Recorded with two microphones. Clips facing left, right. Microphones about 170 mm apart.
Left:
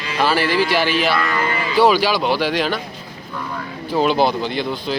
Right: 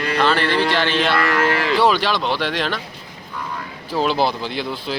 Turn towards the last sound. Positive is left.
turn(degrees=0)  # may be behind; listen again after turning